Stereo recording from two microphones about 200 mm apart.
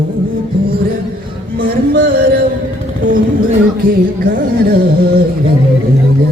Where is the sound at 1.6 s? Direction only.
50° right (ahead or behind).